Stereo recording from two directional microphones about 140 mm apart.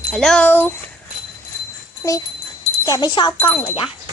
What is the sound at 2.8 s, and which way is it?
Speech, 30° left (ahead or behind).